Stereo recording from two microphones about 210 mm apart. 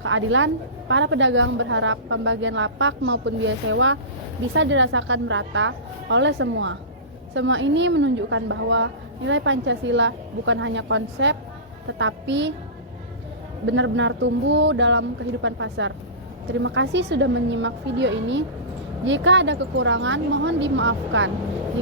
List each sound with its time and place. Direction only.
0.0 s a woman's voice: 70° right (ahead or behind)
13.7 s a woman's voice: 60° right (ahead or behind)